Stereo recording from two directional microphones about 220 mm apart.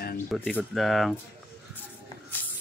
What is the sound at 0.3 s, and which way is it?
Speech, 5° left (ahead or behind).